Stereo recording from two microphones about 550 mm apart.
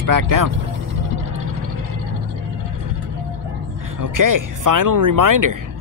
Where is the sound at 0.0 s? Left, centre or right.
Right.